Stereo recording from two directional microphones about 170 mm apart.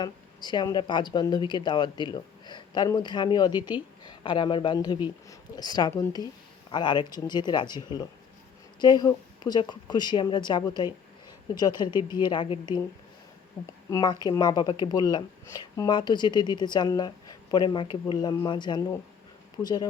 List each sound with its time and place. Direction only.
0.0 s a man's voice: 25° left (ahead or behind)
13.9 s speech: 25° left (ahead or behind)